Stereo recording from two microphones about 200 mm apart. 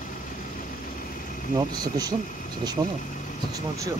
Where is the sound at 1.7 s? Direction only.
20° right (ahead or behind).